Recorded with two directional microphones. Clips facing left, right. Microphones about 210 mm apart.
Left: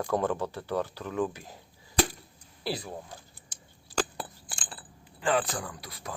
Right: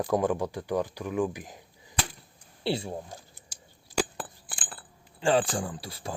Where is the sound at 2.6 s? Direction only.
25° right (ahead or behind).